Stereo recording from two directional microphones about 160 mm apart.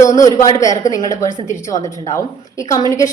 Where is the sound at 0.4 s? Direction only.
20° left (ahead or behind).